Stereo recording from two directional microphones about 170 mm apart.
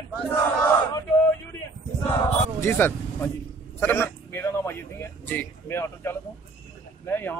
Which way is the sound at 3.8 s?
10° left (ahead or behind).